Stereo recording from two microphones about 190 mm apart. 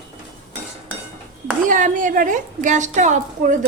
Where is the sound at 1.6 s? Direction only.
45° right (ahead or behind).